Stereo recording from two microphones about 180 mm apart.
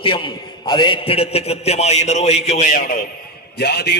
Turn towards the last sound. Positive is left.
turn(degrees=65)  # may be behind; listen again after turning